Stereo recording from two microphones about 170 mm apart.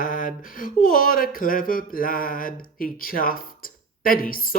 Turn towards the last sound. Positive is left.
turn(degrees=55)  # may be behind; listen again after turning